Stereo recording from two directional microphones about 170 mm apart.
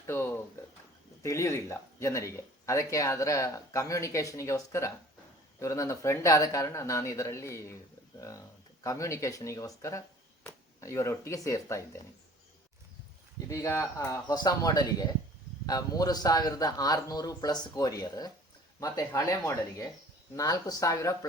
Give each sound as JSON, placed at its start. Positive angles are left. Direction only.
{"t": 0.1, "sound": "a sound", "side_deg": 15}
{"t": 1.2, "sound": "speech", "side_deg": 15}
{"t": 8.8, "sound": "speech", "side_deg": 20}
{"t": 13.5, "sound": "a man's voice", "side_deg": 15}